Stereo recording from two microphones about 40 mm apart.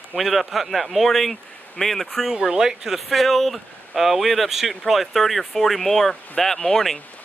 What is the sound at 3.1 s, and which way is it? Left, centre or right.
Speech, centre.